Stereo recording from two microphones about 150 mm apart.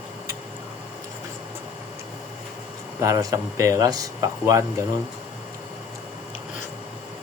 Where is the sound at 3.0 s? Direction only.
20° right (ahead or behind).